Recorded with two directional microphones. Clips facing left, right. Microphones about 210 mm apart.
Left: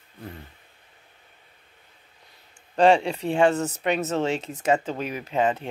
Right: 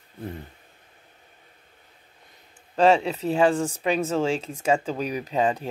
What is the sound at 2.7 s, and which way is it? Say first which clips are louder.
Speech: left 1 dB; 5° right (ahead or behind).